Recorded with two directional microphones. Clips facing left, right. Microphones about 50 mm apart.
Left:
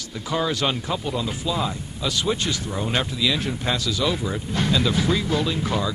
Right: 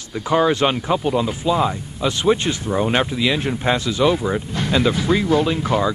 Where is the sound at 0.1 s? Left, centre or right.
Right.